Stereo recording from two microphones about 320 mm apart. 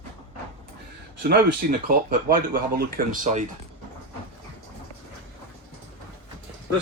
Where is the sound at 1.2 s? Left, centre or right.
Right.